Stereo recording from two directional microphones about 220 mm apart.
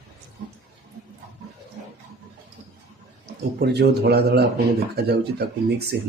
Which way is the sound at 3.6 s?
45° right (ahead or behind).